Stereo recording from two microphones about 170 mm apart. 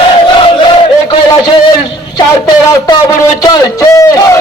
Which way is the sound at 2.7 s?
20° left (ahead or behind).